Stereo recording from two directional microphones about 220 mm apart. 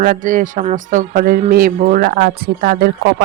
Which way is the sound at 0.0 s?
40° right (ahead or behind).